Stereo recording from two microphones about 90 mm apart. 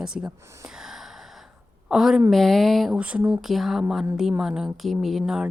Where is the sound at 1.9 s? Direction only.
5° right (ahead or behind).